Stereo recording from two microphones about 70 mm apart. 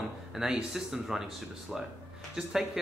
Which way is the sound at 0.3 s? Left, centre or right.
Centre.